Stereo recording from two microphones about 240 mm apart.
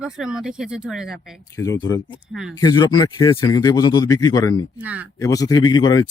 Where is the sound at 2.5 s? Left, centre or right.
Centre.